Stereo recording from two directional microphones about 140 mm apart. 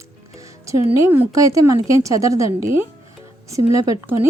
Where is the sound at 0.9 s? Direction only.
20° right (ahead or behind).